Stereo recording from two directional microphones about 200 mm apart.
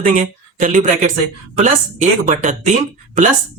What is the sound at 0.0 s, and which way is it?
Speech, 40° right (ahead or behind).